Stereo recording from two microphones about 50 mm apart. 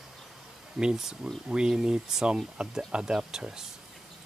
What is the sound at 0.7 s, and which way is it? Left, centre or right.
Speech, centre.